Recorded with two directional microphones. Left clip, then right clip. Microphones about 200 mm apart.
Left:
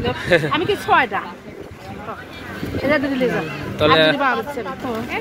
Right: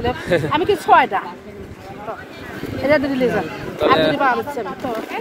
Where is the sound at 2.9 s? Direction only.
55° right (ahead or behind).